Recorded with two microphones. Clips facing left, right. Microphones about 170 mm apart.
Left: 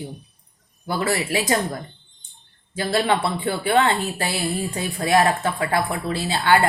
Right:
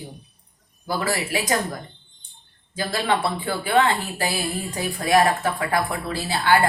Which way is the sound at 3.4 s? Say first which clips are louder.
Left 1 dB; 25° left (ahead or behind).